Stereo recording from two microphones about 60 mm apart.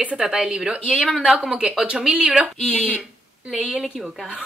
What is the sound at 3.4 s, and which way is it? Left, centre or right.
Speech, centre.